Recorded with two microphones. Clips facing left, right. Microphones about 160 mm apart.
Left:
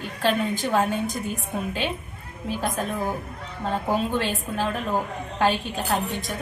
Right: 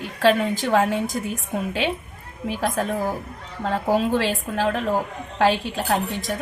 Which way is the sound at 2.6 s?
90° right.